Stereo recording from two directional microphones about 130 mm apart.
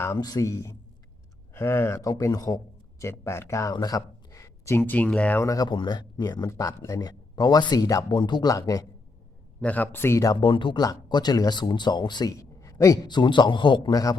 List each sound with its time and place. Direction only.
0.0 s speech: 25° left (ahead or behind)
5.5 s speech: 30° left (ahead or behind)
9.6 s a man's voice: 10° left (ahead or behind)
10.4 s speech: 40° left (ahead or behind)